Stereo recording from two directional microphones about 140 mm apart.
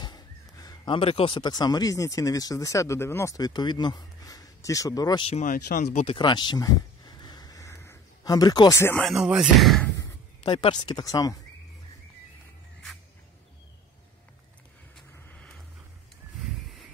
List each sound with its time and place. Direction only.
0.0 s speech: 30° left (ahead or behind)
5.4 s speech: 75° left (ahead or behind)
6.0 s a sound: 35° left (ahead or behind); by 9.0 s 20° left (ahead or behind)
9.0 s speech: 5° right (ahead or behind)
9.9 s speech: 35° left (ahead or behind)
15.2 s vehicle: 10° left (ahead or behind)